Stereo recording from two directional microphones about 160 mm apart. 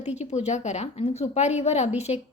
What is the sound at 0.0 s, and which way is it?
A woman's voice, 45° left (ahead or behind).